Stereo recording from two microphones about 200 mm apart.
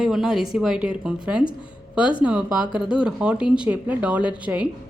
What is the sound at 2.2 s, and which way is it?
Speech, 5° right (ahead or behind).